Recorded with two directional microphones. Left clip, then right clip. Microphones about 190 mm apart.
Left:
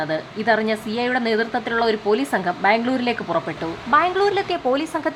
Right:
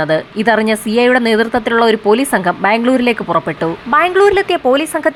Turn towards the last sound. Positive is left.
turn(degrees=-25)  # may be behind; listen again after turning